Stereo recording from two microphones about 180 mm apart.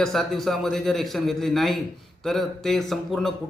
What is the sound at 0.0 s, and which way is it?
A man's voice, centre (ahead or behind).